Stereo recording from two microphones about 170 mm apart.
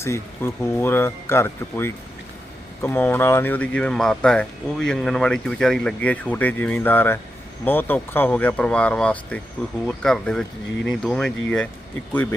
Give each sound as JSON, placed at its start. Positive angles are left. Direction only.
{"t": 0.0, "sound": "speech", "side_deg": 15}